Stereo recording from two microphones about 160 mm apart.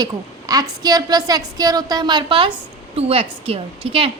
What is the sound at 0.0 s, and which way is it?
A woman's voice, 25° right (ahead or behind).